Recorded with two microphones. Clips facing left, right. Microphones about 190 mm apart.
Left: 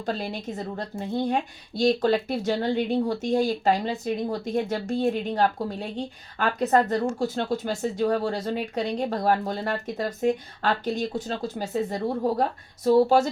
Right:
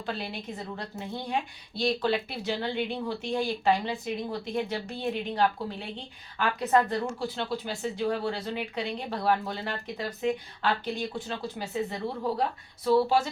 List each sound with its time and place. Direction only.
0.0 s speech: 40° left (ahead or behind)